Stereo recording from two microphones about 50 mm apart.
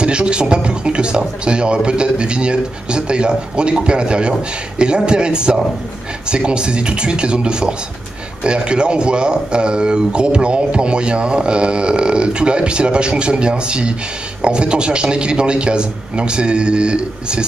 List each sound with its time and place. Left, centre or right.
0.0 s speech: right